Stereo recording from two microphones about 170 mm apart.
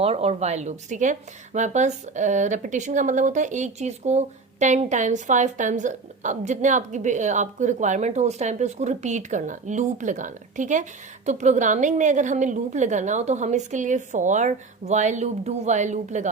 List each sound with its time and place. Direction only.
0.0 s speech: 35° right (ahead or behind)